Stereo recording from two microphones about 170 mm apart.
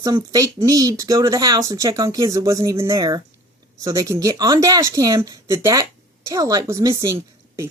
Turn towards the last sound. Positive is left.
turn(degrees=-20)  # may be behind; listen again after turning